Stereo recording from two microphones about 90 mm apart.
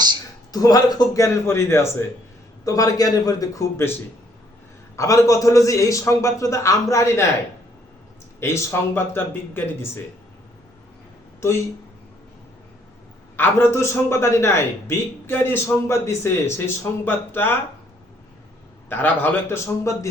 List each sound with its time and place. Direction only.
0.5 s a man's voice: 45° left (ahead or behind)
2.6 s a man's voice: 40° left (ahead or behind)
4.9 s a man's voice: 40° left (ahead or behind)
8.4 s a man's voice: 30° left (ahead or behind)
13.3 s a man's voice: 25° left (ahead or behind)
18.9 s a man's voice: 20° left (ahead or behind)